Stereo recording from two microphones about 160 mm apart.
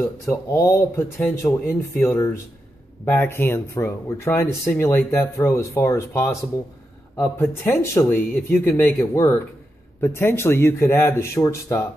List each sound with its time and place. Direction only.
0.0 s speech: 15° left (ahead or behind)